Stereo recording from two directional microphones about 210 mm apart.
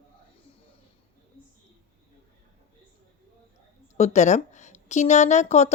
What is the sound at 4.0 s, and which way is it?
A woman's voice, 35° left (ahead or behind).